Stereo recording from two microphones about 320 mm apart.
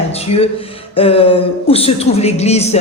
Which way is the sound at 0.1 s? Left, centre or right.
Centre.